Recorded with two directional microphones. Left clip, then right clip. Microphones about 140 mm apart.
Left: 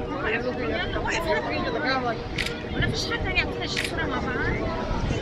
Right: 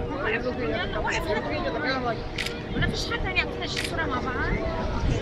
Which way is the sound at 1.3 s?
35° right (ahead or behind).